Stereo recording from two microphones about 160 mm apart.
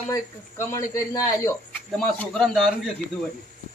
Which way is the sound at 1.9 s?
5° left (ahead or behind).